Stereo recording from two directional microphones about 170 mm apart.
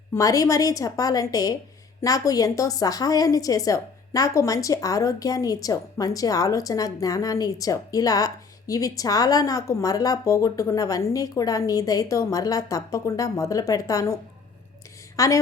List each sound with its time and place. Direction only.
0.1 s a woman's voice: 20° left (ahead or behind)